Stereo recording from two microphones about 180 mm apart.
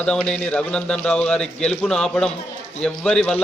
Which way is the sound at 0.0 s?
5° left (ahead or behind).